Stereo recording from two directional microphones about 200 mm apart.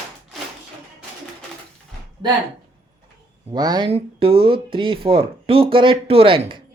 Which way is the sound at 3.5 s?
20° right (ahead or behind).